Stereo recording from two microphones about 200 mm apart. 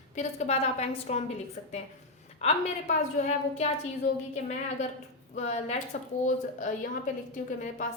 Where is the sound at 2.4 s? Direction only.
30° left (ahead or behind).